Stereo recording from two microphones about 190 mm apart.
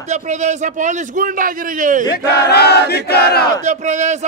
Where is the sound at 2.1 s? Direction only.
55° left (ahead or behind).